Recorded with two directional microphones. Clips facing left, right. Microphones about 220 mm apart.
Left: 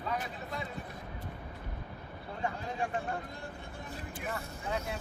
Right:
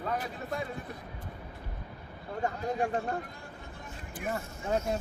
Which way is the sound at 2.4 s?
40° right (ahead or behind).